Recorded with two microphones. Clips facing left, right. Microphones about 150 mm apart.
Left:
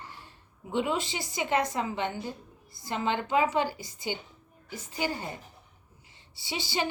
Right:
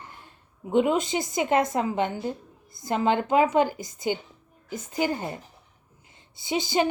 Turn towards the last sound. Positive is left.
turn(degrees=-45)  # may be behind; listen again after turning